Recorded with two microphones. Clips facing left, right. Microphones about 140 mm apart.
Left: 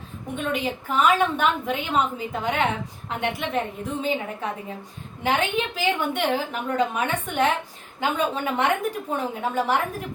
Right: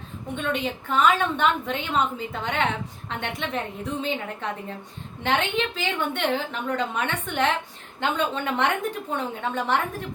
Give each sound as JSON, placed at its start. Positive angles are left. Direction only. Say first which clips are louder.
{"t": 0.3, "sound": "a woman's voice", "louder": "left 1 dB", "side_deg": 5}